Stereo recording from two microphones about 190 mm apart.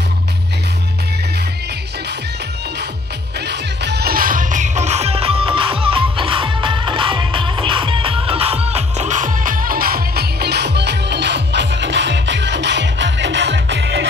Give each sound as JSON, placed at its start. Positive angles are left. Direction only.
{"t": 3.3, "sound": "music", "side_deg": -60}